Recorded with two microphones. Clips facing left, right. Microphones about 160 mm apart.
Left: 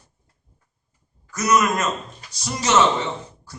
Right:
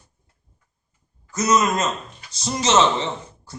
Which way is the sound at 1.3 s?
20° right (ahead or behind).